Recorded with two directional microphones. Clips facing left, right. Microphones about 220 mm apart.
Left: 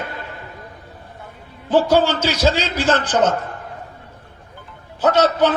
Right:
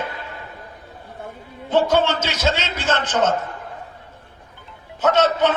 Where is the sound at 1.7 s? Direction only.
35° left (ahead or behind).